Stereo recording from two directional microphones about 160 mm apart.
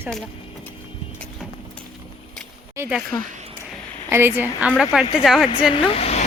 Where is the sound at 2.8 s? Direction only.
10° right (ahead or behind).